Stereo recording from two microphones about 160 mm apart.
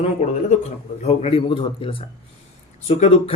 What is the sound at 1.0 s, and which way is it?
Speech, 40° left (ahead or behind).